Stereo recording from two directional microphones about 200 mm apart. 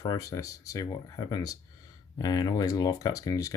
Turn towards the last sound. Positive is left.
turn(degrees=15)  # may be behind; listen again after turning